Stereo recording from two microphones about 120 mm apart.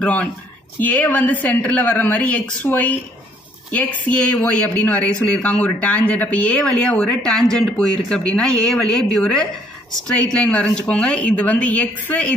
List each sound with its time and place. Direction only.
0.0 s speech: 10° left (ahead or behind)